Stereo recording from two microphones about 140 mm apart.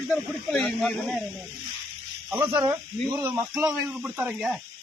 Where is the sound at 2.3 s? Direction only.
15° right (ahead or behind).